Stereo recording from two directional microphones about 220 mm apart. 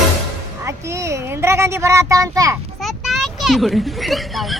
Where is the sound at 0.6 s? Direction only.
10° right (ahead or behind).